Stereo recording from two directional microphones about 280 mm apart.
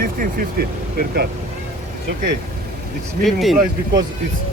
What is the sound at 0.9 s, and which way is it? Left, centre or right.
Speech, right.